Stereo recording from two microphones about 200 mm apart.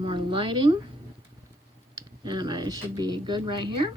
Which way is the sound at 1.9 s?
20° right (ahead or behind).